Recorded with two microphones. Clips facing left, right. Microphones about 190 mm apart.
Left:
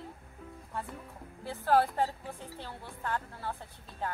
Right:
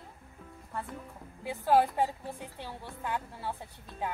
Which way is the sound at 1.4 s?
15° right (ahead or behind).